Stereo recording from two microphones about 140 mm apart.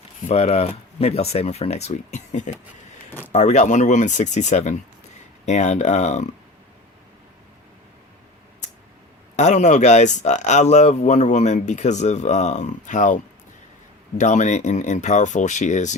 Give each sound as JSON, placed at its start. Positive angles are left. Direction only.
{"t": 0.3, "sound": "speech", "side_deg": 50}
{"t": 9.3, "sound": "speech", "side_deg": 55}